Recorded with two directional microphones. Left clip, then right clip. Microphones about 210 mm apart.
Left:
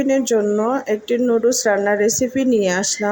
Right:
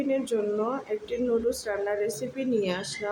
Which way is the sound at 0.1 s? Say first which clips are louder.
Left 10 dB; 30° left (ahead or behind).